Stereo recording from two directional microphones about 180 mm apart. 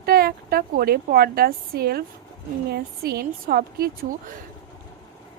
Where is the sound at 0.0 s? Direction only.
60° right (ahead or behind).